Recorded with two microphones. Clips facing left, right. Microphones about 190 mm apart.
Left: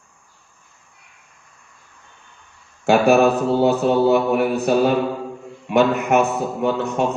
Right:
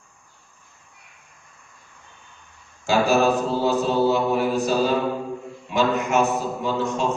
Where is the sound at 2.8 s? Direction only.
60° left (ahead or behind).